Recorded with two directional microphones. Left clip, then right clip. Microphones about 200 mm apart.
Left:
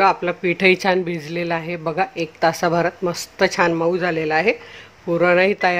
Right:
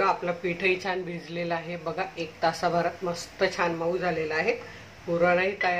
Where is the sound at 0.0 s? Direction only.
45° left (ahead or behind).